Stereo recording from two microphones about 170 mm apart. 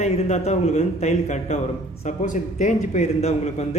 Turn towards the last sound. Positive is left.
turn(degrees=40)  # may be behind; listen again after turning